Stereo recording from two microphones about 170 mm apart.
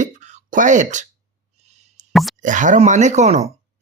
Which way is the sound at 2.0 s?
45° right (ahead or behind).